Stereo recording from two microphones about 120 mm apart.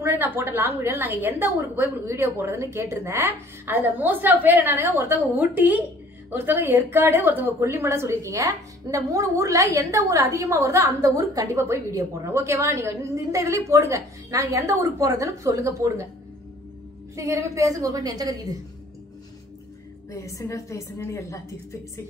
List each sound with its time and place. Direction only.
0.0 s a woman's voice: 20° right (ahead or behind)
17.1 s a woman's voice: 25° right (ahead or behind)
20.1 s a woman's voice: 25° left (ahead or behind)